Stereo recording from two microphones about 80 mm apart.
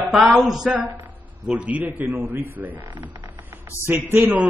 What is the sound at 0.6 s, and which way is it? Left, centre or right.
A man's voice, right.